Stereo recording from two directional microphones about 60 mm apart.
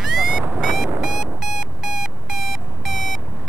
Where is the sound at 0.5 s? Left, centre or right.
Centre.